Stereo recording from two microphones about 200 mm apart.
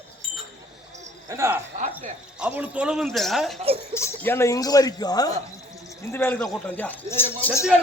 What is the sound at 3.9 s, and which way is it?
Speech, 10° left (ahead or behind).